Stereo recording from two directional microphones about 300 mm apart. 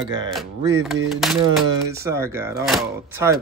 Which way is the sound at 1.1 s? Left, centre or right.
Centre.